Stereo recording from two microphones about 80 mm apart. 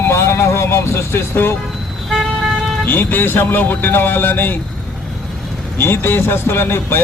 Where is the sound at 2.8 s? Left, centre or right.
Left.